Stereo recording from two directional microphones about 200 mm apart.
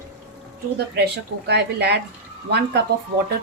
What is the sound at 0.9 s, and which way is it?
A woman's voice, 55° right (ahead or behind).